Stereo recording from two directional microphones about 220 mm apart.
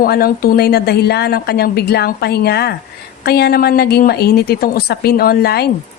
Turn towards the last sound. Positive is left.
turn(degrees=45)  # may be behind; listen again after turning